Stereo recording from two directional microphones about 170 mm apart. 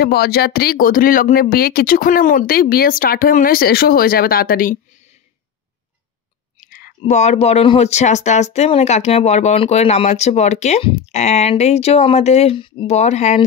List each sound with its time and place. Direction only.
0.0 s speech: 65° left (ahead or behind)
6.6 s clicking: 55° left (ahead or behind)
7.0 s speech: 40° left (ahead or behind)